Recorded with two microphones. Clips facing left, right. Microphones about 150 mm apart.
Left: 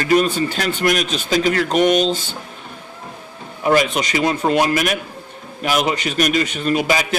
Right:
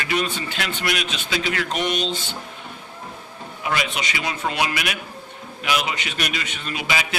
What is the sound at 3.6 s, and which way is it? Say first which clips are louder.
A man's voice: left 9 dB; 45° left (ahead or behind).